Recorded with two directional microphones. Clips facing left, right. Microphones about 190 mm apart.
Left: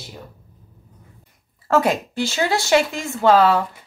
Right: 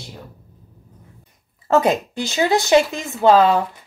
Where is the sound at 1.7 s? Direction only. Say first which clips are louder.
Right 2 dB; 20° right (ahead or behind).